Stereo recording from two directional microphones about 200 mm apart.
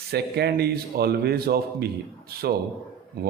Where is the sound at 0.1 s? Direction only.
55° right (ahead or behind).